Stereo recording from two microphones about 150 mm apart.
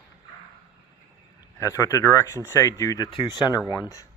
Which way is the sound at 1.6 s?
20° left (ahead or behind).